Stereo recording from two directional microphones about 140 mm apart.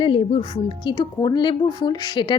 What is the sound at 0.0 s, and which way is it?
A woman's voice, 40° left (ahead or behind).